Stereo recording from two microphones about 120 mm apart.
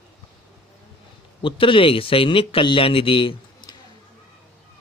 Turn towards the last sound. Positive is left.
turn(degrees=40)  # may be behind; listen again after turning